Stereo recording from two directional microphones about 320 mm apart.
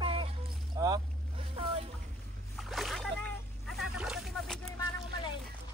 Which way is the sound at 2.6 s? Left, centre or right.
Centre.